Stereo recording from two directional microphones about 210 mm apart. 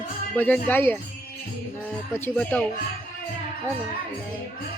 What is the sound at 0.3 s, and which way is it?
Speech, 10° left (ahead or behind).